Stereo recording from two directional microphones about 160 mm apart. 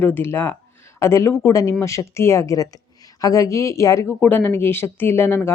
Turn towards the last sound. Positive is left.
turn(degrees=15)  # may be behind; listen again after turning